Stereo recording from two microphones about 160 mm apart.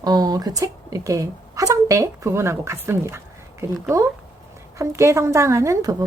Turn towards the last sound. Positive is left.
turn(degrees=-20)  # may be behind; listen again after turning